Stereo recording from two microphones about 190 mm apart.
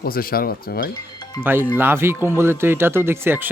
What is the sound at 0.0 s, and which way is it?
Speech, 50° left (ahead or behind).